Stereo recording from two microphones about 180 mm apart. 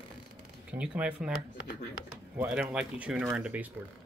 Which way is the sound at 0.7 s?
5° right (ahead or behind).